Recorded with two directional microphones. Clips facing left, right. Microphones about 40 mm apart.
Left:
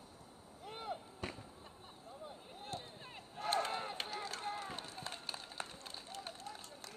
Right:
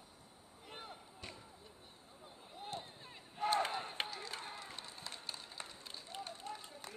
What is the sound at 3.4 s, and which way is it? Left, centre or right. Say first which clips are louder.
Battle cry: right 4 dB; centre.